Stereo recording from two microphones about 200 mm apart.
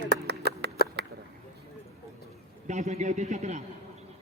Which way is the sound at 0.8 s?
50° left (ahead or behind).